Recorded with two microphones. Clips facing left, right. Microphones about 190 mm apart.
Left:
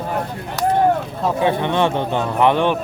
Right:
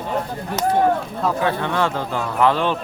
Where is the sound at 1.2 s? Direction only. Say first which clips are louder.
Left 3 dB; 20° left (ahead or behind).